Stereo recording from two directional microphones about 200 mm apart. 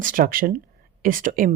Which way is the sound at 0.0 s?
45° right (ahead or behind).